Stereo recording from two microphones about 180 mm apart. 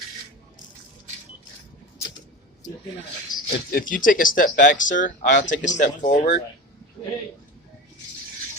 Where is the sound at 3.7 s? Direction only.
50° left (ahead or behind).